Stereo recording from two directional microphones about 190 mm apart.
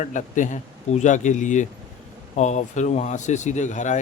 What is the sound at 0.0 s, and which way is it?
Speech, 40° left (ahead or behind).